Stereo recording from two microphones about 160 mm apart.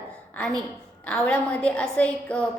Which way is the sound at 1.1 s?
10° left (ahead or behind).